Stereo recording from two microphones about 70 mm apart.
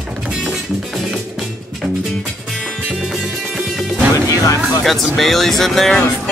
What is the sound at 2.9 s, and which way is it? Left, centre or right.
Music, centre.